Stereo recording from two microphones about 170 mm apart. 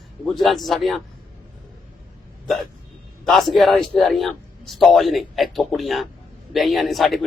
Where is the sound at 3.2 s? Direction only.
5° left (ahead or behind).